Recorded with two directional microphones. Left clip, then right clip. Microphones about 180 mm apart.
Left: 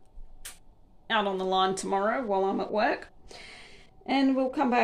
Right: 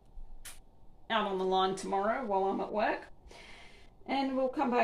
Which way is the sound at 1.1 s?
40° left (ahead or behind).